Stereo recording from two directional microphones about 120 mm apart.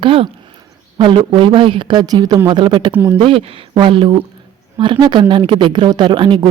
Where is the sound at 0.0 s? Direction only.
50° right (ahead or behind).